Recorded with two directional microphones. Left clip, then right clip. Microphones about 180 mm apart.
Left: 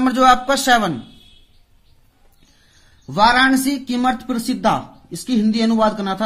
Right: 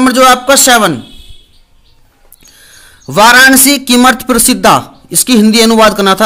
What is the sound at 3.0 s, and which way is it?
A man's voice, 35° right (ahead or behind).